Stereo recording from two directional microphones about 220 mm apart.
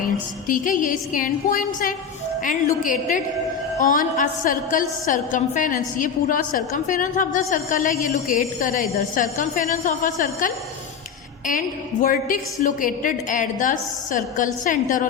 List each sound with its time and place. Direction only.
0.0 s a woman's voice: 40° left (ahead or behind)
12.0 s a woman's voice: 40° left (ahead or behind)